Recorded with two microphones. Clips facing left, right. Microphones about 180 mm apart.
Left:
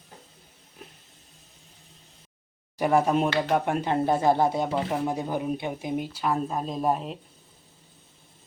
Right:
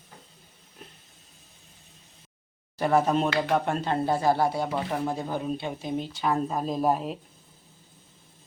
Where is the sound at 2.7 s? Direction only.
15° left (ahead or behind).